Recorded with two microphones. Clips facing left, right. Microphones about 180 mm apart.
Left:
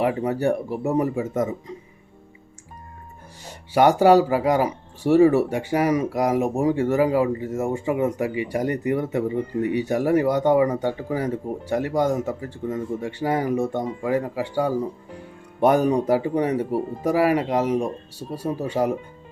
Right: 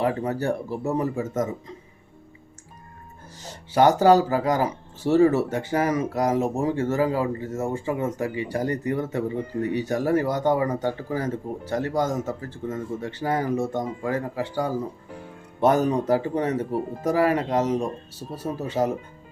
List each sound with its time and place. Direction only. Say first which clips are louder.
0.0 s speech: left 3 dB; 15° left (ahead or behind)
3.7 s speech: left 1 dB; 15° left (ahead or behind)